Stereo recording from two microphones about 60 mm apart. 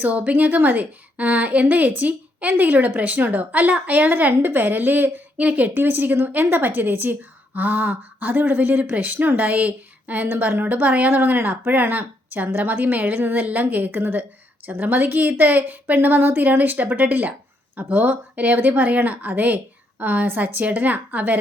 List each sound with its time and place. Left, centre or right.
0.0 s a woman's voice: right